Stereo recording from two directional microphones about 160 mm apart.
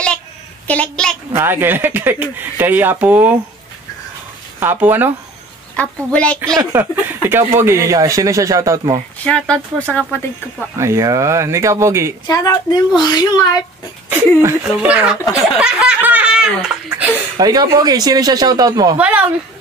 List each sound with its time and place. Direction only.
0.7 s speech: 5° left (ahead or behind)
1.3 s speech: 15° right (ahead or behind)
4.6 s speech: 10° right (ahead or behind)
5.8 s speech: 10° left (ahead or behind)
6.4 s speech: 15° right (ahead or behind)
9.2 s speech: 10° left (ahead or behind)
10.8 s speech: 20° right (ahead or behind)
12.3 s a woman's voice: 25° left (ahead or behind)
14.6 s speech: 10° right (ahead or behind)
17.4 s speech: 25° right (ahead or behind)
18.9 s speech: 10° right (ahead or behind)